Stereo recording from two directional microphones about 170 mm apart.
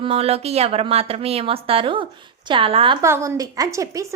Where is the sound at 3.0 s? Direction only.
15° right (ahead or behind).